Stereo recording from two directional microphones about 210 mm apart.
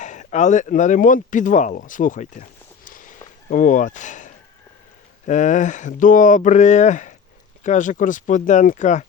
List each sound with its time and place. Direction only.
0.0 s speech: 35° left (ahead or behind)
2.8 s walk: 40° left (ahead or behind)
3.5 s speech: 40° left (ahead or behind)